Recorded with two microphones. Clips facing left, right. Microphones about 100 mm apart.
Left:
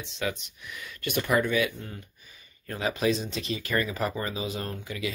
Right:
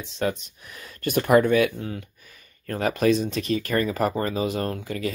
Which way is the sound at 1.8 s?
75° right (ahead or behind).